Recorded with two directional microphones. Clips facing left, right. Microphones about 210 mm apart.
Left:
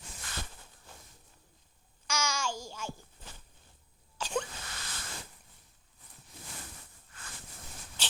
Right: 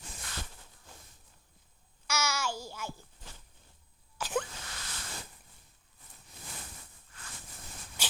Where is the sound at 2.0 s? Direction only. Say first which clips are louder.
Even; 10° right (ahead or behind).